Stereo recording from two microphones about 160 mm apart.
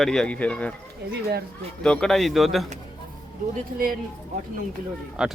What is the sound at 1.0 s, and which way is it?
Speech, 90° right.